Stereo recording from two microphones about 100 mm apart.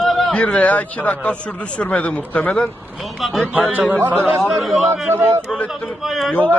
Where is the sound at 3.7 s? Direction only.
15° right (ahead or behind).